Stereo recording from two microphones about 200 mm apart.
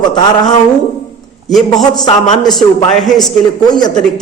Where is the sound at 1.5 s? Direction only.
Centre (ahead or behind).